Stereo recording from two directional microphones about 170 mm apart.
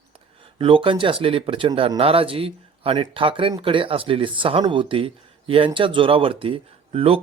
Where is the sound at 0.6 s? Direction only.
30° right (ahead or behind).